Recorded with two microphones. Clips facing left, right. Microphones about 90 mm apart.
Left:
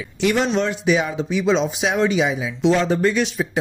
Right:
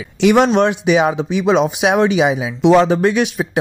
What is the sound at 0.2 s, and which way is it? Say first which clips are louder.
Speech: right 7 dB; 70° right (ahead or behind).